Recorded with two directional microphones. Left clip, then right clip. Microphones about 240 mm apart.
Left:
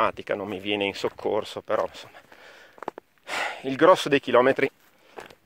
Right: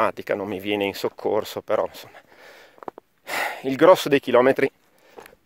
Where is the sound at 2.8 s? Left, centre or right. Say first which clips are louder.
Left 1 dB; left.